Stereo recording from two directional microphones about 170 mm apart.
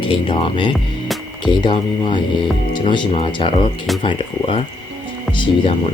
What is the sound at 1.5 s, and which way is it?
Speech, 30° left (ahead or behind).